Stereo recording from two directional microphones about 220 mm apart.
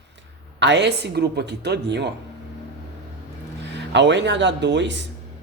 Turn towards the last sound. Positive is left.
turn(degrees=-55)  # may be behind; listen again after turning